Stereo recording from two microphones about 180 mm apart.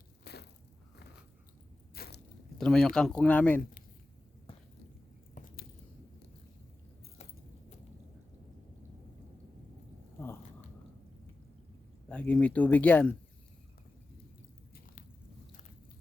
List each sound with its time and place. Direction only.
0.3 s biting: 65° left (ahead or behind)
2.0 s biting: 65° left (ahead or behind)
2.6 s speech: 5° left (ahead or behind)
5.3 s biting: 50° left (ahead or behind)
12.0 s speech: 5° left (ahead or behind)